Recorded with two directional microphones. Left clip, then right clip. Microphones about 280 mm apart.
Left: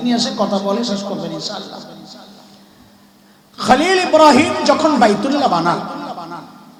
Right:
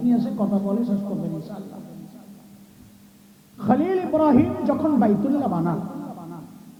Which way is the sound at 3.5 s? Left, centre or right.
Centre.